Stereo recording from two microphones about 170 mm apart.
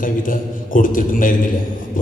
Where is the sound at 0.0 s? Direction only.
55° left (ahead or behind).